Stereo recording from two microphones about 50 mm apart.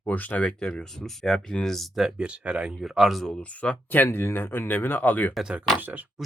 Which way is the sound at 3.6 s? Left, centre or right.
Left.